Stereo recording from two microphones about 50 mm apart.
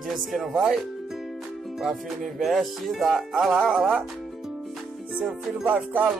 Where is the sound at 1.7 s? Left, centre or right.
Centre.